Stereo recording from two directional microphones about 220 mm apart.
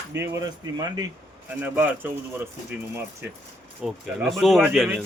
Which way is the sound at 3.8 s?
Centre (ahead or behind).